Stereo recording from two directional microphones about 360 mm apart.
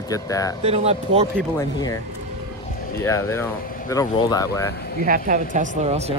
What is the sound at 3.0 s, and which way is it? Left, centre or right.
Speech, centre.